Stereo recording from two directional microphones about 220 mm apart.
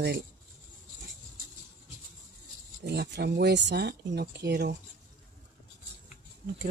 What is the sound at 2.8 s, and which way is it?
Speech, 50° right (ahead or behind).